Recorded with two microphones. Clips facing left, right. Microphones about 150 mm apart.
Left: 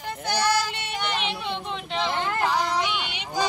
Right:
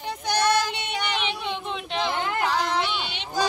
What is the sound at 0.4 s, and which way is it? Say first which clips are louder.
Child singing: right 2 dB; 5° left (ahead or behind).